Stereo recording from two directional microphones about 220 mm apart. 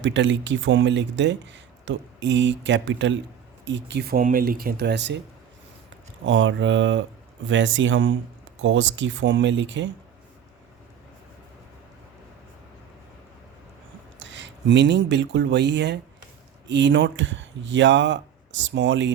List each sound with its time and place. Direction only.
0.0 s speech: 55° right (ahead or behind)
6.2 s speech: 60° right (ahead or behind)
14.2 s speech: 55° right (ahead or behind)